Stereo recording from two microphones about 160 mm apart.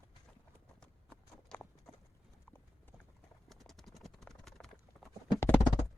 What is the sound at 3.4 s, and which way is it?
Clip-clop, centre (ahead or behind).